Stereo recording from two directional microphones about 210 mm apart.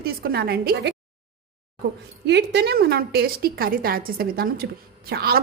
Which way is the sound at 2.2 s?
55° right (ahead or behind).